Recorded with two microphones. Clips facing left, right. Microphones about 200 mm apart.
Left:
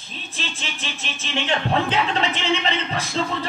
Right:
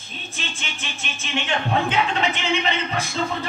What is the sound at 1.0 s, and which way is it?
Speech, 35° left (ahead or behind).